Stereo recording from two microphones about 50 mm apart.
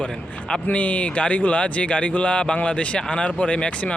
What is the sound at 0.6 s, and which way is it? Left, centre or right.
Speech, left.